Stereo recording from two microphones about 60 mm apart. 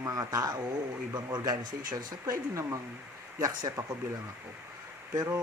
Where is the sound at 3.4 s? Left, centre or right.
Right.